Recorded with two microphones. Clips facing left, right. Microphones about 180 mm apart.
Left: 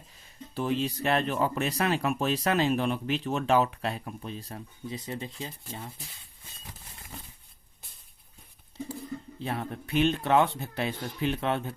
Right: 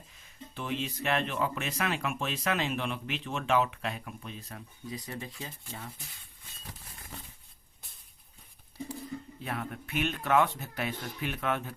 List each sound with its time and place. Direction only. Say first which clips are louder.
0.5 s speech: left 6 dB; 35° left (ahead or behind); by 5.5 s 20° left (ahead or behind)
9.4 s speech: left 4 dB; 30° left (ahead or behind)